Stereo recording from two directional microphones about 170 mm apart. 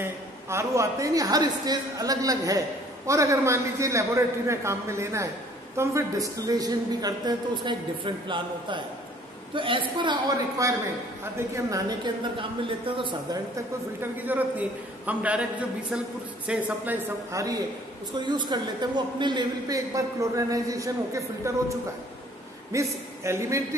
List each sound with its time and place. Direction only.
0.0 s a man's voice: 15° right (ahead or behind)
14.1 s a man's voice: 10° right (ahead or behind)
16.4 s a man's voice: 10° right (ahead or behind)
22.7 s a man's voice: 15° right (ahead or behind)